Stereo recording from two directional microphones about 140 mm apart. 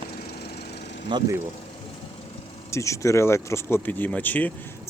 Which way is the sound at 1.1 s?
35° right (ahead or behind).